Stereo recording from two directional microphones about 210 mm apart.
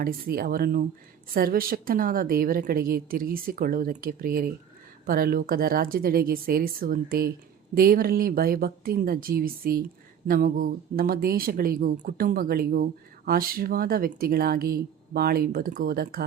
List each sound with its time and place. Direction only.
0.0 s speech: 45° right (ahead or behind)